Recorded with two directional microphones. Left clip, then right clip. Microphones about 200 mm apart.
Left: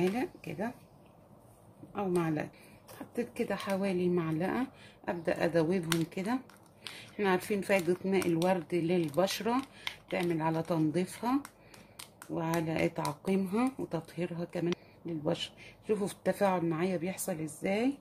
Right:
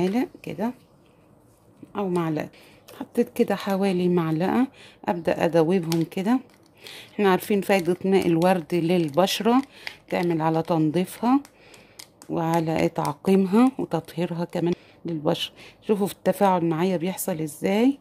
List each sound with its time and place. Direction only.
0.0 s speech: 40° right (ahead or behind)
1.9 s speech: 40° right (ahead or behind)